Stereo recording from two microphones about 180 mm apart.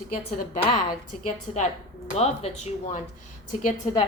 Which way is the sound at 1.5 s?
40° left (ahead or behind).